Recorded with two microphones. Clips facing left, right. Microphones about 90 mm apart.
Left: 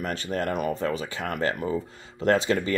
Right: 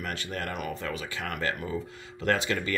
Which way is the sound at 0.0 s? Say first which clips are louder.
Left 6 dB; 35° left (ahead or behind).